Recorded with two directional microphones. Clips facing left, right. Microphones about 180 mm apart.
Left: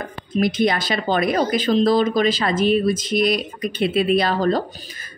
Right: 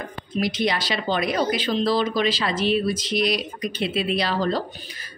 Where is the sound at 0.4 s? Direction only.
50° left (ahead or behind).